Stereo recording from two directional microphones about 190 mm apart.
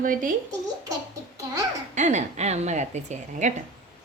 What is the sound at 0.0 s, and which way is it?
Speech, 45° right (ahead or behind).